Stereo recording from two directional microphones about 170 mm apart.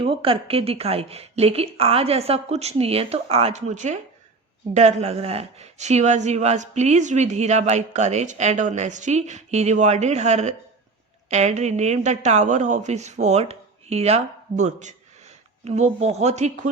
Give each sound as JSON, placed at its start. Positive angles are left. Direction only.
{"t": 0.0, "sound": "a woman's voice", "side_deg": -30}